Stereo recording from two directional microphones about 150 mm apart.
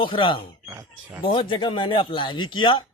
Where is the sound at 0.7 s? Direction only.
20° right (ahead or behind).